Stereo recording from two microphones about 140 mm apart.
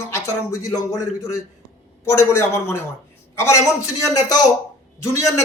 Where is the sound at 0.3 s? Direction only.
20° left (ahead or behind).